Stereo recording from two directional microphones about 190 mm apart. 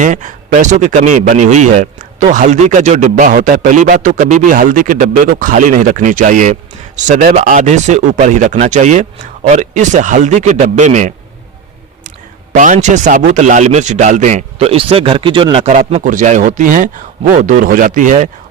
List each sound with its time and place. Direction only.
0.0 s speech: 40° right (ahead or behind)
12.5 s speech: 40° right (ahead or behind)